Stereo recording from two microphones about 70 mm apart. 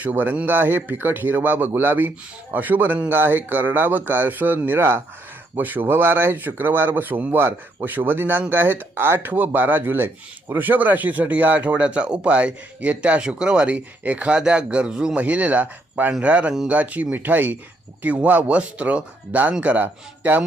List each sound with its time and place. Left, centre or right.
0.0 s speech: right